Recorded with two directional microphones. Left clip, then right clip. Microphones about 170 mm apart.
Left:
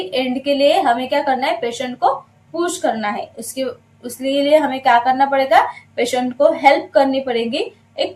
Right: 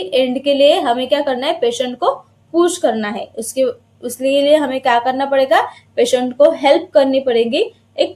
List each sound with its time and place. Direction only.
0.1 s a woman's voice: 50° right (ahead or behind)